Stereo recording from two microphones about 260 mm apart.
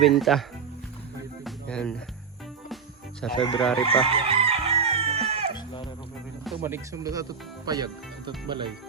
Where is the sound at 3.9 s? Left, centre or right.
Right.